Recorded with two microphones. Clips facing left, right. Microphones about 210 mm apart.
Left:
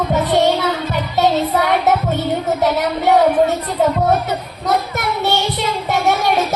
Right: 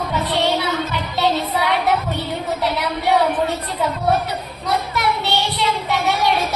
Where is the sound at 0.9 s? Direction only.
45° left (ahead or behind).